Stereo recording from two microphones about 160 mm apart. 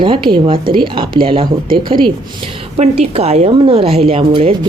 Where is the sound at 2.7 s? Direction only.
40° right (ahead or behind).